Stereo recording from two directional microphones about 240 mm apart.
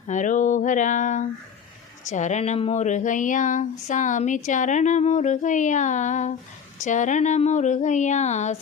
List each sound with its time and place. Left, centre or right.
0.1 s speech: left